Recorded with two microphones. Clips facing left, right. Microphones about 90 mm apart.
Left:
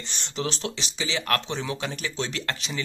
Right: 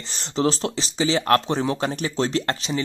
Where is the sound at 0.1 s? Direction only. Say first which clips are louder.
Right 9 dB; 30° right (ahead or behind).